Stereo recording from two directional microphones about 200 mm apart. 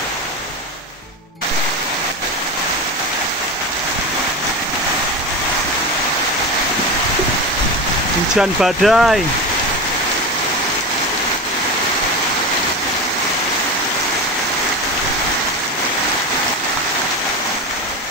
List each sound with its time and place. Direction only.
8.4 s speech: centre (ahead or behind)